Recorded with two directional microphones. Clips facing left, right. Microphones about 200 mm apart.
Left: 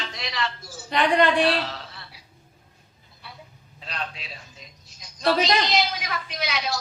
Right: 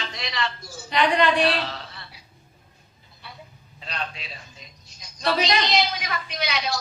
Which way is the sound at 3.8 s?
Centre (ahead or behind).